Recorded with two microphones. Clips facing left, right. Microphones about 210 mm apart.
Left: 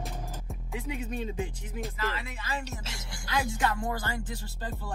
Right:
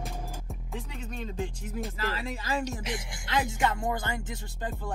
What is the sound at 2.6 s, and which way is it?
Speech, 15° right (ahead or behind).